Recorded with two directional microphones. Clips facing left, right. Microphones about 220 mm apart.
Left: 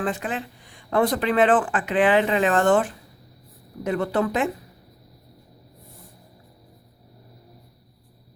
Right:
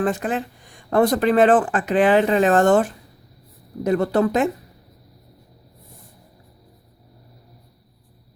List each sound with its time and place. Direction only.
0.0 s speech: 45° right (ahead or behind)